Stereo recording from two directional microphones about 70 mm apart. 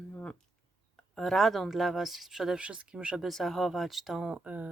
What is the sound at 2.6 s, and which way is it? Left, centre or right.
Speech, centre.